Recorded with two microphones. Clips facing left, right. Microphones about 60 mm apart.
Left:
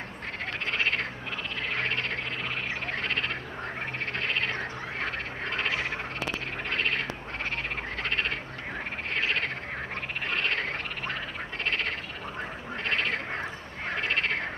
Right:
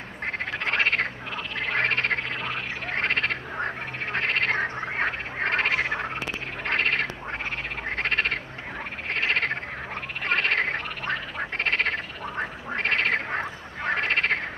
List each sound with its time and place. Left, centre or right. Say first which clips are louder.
0.7 s frog: right 5 dB; right
6.6 s a sound: right 6 dB; right
7.9 s frog: right 6 dB; right